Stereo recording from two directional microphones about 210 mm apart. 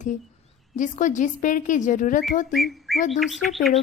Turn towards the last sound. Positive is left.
turn(degrees=0)  # may be behind; listen again after turning